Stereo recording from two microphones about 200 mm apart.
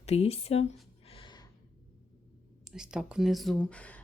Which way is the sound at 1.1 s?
25° left (ahead or behind).